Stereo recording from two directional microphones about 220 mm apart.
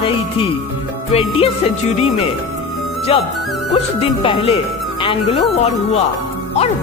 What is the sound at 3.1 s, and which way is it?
Speech, 25° left (ahead or behind).